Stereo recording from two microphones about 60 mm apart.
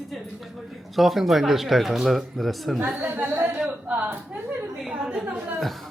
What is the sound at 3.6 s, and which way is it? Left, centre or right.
Speech, centre.